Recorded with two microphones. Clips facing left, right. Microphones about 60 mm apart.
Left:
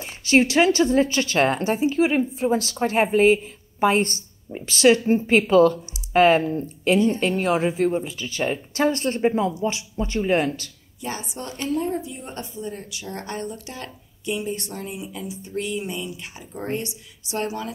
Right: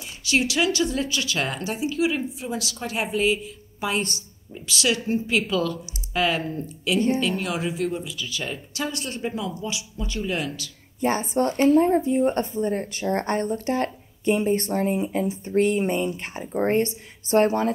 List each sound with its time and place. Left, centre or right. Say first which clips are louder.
0.0 s speech: left 5 dB; left
11.0 s speech: right 9 dB; right